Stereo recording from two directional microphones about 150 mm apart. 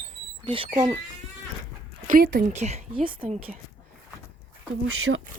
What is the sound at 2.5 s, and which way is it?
Speech, 45° right (ahead or behind).